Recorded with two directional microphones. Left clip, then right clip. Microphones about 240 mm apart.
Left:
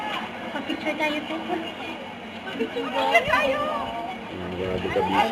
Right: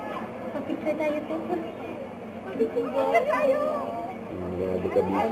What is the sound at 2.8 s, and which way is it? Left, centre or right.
Speech, centre.